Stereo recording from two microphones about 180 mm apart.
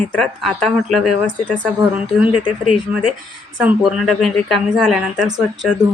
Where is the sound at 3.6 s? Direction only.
5° right (ahead or behind).